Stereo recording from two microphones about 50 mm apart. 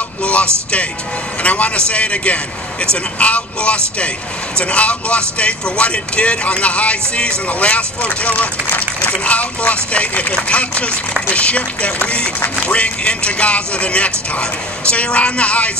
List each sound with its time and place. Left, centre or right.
0.2 s music: left
1.4 s speech: left